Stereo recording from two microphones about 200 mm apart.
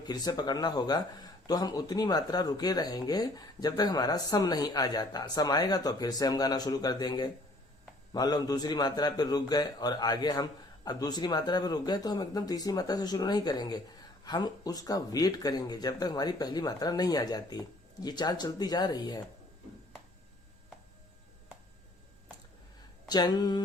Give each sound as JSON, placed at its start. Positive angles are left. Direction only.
{"t": 0.0, "sound": "speech", "side_deg": 20}
{"t": 23.0, "sound": "speech", "side_deg": 20}